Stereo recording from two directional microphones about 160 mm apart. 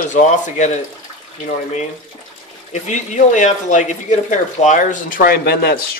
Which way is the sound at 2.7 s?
50° left (ahead or behind).